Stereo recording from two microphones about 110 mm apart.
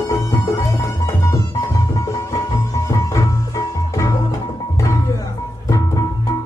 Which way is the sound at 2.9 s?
30° left (ahead or behind).